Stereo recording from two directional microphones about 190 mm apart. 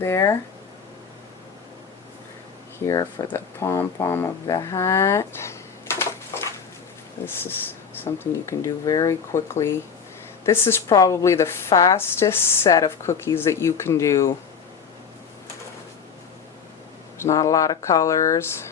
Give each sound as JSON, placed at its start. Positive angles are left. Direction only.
{"t": 0.0, "sound": "a woman's voice", "side_deg": 15}
{"t": 2.8, "sound": "speech", "side_deg": 20}
{"t": 8.0, "sound": "a woman's voice", "side_deg": 15}
{"t": 17.2, "sound": "a woman's voice", "side_deg": 15}